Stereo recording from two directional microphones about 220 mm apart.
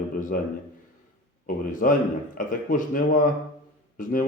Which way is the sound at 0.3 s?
40° left (ahead or behind).